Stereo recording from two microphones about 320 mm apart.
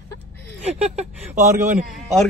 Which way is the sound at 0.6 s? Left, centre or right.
Right.